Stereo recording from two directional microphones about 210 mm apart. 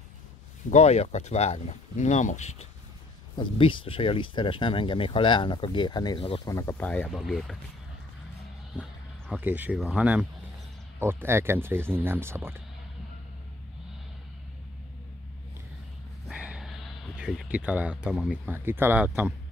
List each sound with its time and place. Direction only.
0.7 s speech: 30° left (ahead or behind)
6.5 s speech: 15° left (ahead or behind)
9.3 s speech: 10° right (ahead or behind)
16.3 s a sound: 5° right (ahead or behind)
17.2 s speech: 5° right (ahead or behind)